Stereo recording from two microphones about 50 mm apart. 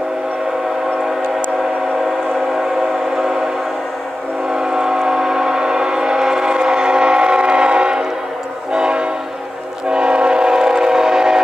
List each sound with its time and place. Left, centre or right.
4.5 s train: centre
8.7 s train horn: centre
9.8 s train: centre